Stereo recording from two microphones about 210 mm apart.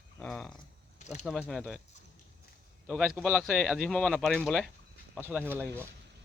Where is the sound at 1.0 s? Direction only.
35° left (ahead or behind).